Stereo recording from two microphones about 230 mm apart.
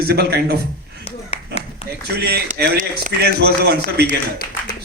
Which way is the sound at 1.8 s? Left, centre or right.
Left.